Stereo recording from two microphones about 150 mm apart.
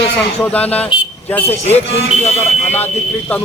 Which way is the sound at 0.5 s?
10° left (ahead or behind).